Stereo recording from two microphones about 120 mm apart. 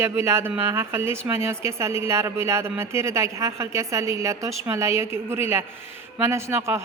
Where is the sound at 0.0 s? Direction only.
20° right (ahead or behind).